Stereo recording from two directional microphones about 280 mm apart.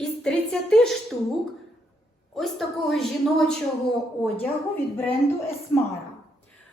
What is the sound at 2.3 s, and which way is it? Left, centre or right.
A woman's voice, centre.